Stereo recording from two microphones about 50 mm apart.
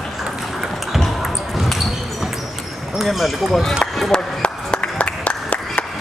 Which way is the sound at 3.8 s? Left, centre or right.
Centre.